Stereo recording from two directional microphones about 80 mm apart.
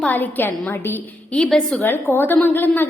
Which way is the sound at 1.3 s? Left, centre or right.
Centre.